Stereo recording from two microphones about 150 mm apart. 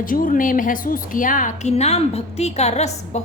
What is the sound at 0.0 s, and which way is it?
A woman's voice, 70° left (ahead or behind).